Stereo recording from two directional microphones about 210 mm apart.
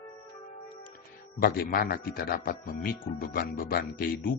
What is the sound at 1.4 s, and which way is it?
Speech, 45° left (ahead or behind).